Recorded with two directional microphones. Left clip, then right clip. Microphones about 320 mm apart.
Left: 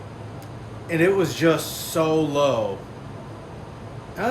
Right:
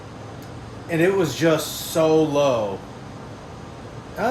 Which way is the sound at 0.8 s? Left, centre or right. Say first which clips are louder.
Even; centre.